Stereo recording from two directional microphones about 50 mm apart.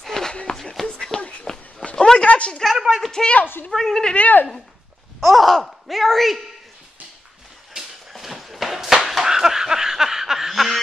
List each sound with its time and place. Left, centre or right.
0.0 s a sound: centre
2.6 s a sound: centre
3.7 s a woman's voice: centre
4.1 s speech: left
5.2 s speech: centre
8.1 s slap: centre